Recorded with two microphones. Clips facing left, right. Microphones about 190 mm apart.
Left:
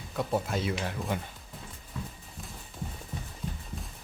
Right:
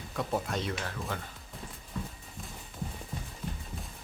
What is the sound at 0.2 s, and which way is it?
Speech, centre (ahead or behind).